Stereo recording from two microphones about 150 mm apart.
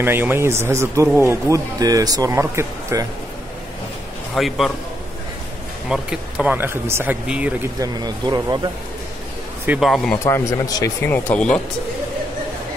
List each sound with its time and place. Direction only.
0.0 s speech: 15° right (ahead or behind)
4.4 s speech: centre (ahead or behind)
5.9 s speech: 5° right (ahead or behind)
7.8 s speech: 25° right (ahead or behind)
9.7 s speech: centre (ahead or behind)
10.1 s speech: 20° left (ahead or behind)